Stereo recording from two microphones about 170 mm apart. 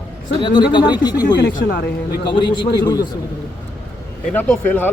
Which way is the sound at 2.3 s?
25° left (ahead or behind).